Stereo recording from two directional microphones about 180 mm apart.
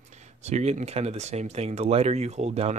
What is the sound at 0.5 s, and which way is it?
Speech, 40° right (ahead or behind).